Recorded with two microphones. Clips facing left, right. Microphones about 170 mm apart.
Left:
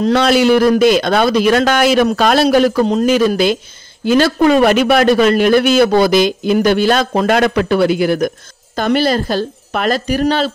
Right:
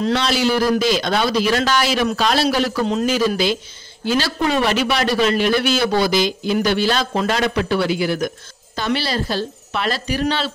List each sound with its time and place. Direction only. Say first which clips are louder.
0.0 s a man's voice: left 7 dB; 55° left (ahead or behind)
3.1 s a man's voice: left 6 dB; 55° left (ahead or behind)